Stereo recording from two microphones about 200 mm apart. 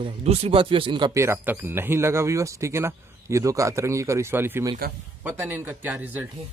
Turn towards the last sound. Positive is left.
turn(degrees=-10)  # may be behind; listen again after turning